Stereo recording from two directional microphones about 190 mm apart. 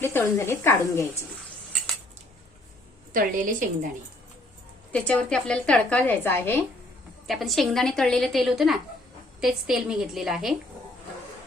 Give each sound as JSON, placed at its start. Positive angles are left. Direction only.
{"t": 0.0, "sound": "a woman's voice", "side_deg": 15}
{"t": 3.1, "sound": "a woman's voice", "side_deg": -45}
{"t": 4.9, "sound": "a woman's voice", "side_deg": 5}
{"t": 7.3, "sound": "a woman's voice", "side_deg": 0}